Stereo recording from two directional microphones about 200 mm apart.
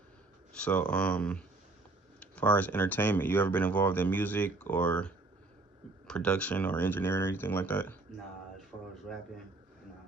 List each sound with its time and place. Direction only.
0.5 s speech: 5° left (ahead or behind)